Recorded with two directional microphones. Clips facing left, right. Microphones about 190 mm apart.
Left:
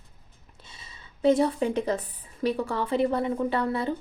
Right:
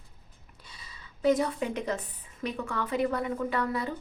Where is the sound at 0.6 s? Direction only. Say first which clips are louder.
Left 1 dB; 25° left (ahead or behind).